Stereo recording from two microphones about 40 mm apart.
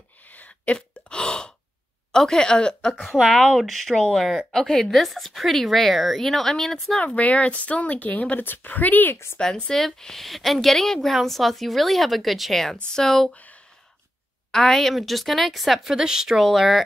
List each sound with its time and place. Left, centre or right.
0.2 s sneeze: left
1.0 s gasp: left
2.1 s a woman's voice: centre
3.3 s a woman's voice: centre
4.9 s speech: centre
7.2 s speech: left
8.4 s speech: left
9.1 s a woman's voice: left
9.8 s a woman's voice: centre
13.3 s speech: left
14.5 s speech: centre
16.0 s speech: centre